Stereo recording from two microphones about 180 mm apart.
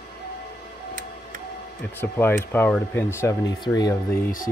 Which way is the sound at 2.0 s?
10° left (ahead or behind).